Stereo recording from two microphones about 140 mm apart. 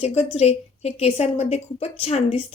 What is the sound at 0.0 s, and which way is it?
A woman's voice, 45° left (ahead or behind).